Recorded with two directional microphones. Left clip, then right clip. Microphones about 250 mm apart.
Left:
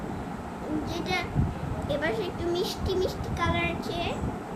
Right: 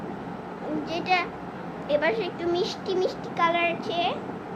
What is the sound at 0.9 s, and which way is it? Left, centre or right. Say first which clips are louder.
A child's voice: right 8 dB; centre.